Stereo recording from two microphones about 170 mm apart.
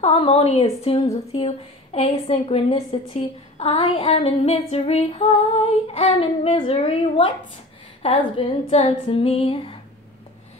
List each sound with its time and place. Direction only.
0.0 s a woman's voice: 35° left (ahead or behind)